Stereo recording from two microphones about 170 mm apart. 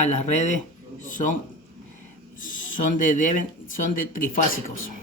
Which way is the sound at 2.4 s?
50° left (ahead or behind).